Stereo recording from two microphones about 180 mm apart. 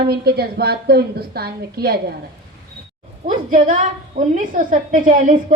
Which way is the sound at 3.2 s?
45° right (ahead or behind).